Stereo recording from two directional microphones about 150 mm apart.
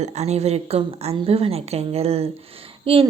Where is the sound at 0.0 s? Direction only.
45° right (ahead or behind).